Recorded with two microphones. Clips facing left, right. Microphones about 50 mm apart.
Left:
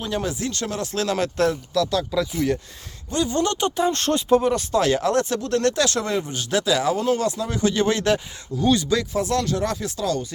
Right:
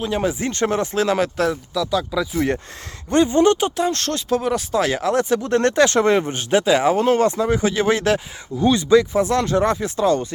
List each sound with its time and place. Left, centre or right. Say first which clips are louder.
0.2 s speech: right 6 dB; right
0.9 s speech: left 1 dB; centre
3.1 s speech: right 7 dB; right
3.3 s speech: right 8 dB; right
3.8 s speech: even; centre
4.4 s speech: even; centre
5.4 s speech: right 4 dB; right
7.5 s speech: right 3 dB; centre
8.7 s speech: right 7 dB; right